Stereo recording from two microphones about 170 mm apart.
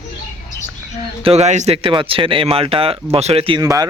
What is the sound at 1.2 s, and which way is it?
Speech, 35° right (ahead or behind).